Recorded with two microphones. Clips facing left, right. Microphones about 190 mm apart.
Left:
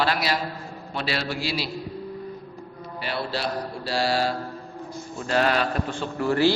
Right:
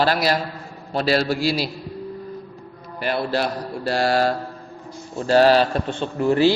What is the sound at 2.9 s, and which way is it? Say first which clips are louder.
Speech: right 7 dB; 50° right (ahead or behind).